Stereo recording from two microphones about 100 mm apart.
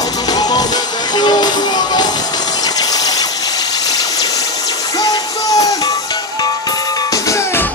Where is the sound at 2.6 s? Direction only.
40° left (ahead or behind).